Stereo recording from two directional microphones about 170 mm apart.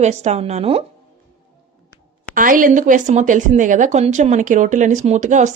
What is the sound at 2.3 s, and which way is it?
Speech, 55° right (ahead or behind).